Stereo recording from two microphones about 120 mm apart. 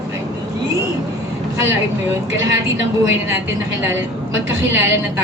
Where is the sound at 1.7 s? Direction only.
20° right (ahead or behind).